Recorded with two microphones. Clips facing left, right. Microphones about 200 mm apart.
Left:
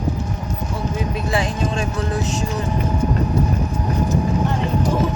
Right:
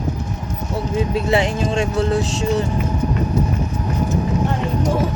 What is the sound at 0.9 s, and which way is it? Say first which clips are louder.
Speech: right 6 dB; 25° right (ahead or behind).